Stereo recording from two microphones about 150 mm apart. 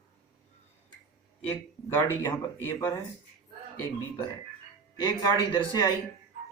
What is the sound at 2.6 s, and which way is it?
Speech, 20° left (ahead or behind).